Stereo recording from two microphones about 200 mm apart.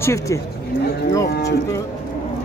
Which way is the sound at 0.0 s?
15° left (ahead or behind).